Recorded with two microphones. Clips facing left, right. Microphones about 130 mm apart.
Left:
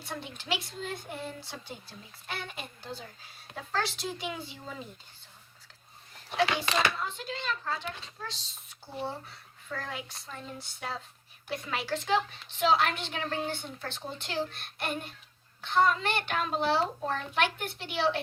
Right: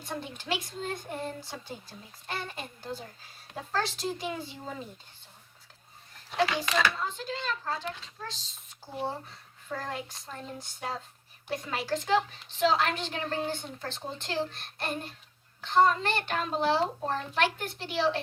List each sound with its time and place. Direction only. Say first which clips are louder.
0.0 s a woman's voice: right 3 dB; 45° right (ahead or behind)
6.9 s a woman's voice: right 2 dB; 35° right (ahead or behind)